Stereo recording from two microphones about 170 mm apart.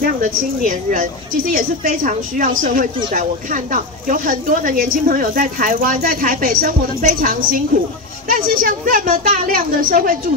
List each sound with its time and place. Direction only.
0.0 s a woman's voice: 55° right (ahead or behind)